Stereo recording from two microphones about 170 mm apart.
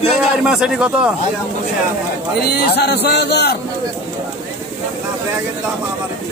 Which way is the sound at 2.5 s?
70° left (ahead or behind).